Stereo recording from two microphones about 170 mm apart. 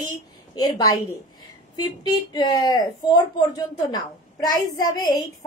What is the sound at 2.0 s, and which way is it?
A woman's voice, 25° left (ahead or behind).